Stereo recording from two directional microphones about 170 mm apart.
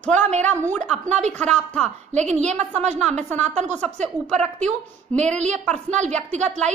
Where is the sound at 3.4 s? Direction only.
40° right (ahead or behind).